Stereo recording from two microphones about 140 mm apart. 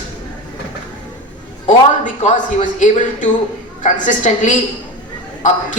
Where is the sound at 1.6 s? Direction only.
60° left (ahead or behind).